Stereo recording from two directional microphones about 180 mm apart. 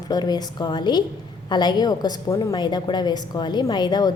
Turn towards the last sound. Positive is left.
turn(degrees=25)  # may be behind; listen again after turning